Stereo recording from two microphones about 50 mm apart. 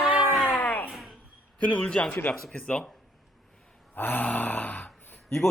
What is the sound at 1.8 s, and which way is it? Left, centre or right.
Speech, centre.